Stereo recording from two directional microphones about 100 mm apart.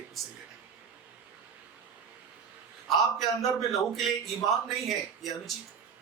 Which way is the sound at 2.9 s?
Centre (ahead or behind).